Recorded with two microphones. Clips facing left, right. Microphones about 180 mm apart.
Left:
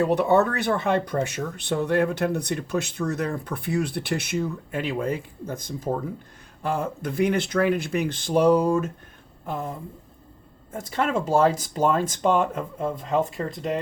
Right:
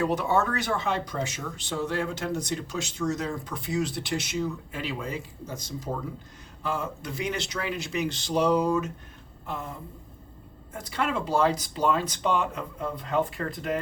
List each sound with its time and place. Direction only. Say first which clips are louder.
0.1 s speech: left 6 dB; 60° left (ahead or behind)
10.7 s speech: left 4 dB; 45° left (ahead or behind)